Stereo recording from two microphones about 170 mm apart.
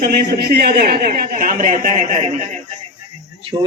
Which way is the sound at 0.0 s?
70° right (ahead or behind).